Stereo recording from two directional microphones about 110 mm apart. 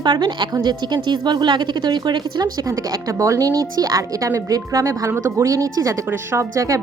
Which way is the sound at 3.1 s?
30° right (ahead or behind).